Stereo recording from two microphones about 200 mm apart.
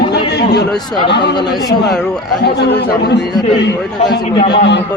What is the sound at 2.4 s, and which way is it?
Speech, 55° left (ahead or behind).